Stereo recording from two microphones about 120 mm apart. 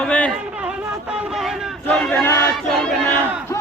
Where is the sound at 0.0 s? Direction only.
10° left (ahead or behind).